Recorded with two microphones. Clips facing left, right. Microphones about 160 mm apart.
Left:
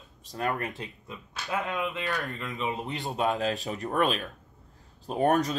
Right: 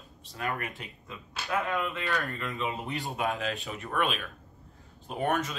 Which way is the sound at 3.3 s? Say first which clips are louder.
Left 5 dB; 35° left (ahead or behind).